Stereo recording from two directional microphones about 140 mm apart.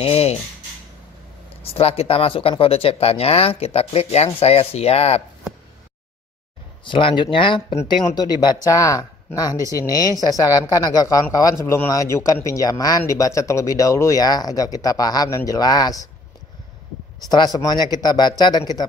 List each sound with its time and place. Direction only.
0.0 s speech: 45° left (ahead or behind)
1.6 s speech: 45° left (ahead or behind)
6.8 s speech: 40° left (ahead or behind)
17.3 s speech: 30° left (ahead or behind)